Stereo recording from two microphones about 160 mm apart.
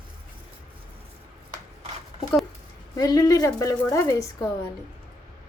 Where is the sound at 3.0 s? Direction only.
25° left (ahead or behind).